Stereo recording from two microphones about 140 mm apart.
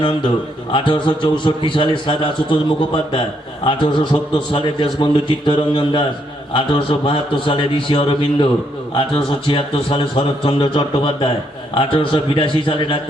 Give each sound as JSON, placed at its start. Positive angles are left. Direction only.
{"t": 0.7, "sound": "a man's voice", "side_deg": 35}